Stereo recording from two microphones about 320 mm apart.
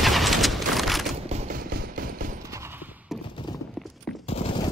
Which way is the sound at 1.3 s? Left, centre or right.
Right.